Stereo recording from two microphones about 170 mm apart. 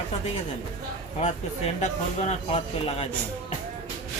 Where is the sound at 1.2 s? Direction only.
40° left (ahead or behind).